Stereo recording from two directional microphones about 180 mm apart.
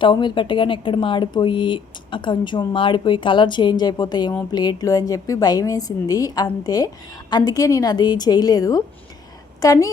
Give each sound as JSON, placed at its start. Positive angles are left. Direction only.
{"t": 0.0, "sound": "a woman's voice", "side_deg": 25}